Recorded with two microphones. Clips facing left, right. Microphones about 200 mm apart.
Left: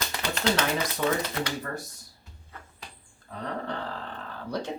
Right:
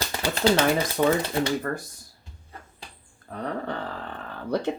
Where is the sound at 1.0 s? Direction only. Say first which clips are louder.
Right 6 dB; 50° right (ahead or behind).